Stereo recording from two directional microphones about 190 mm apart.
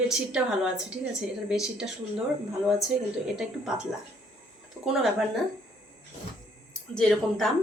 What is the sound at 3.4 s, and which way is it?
Speech, 5° right (ahead or behind).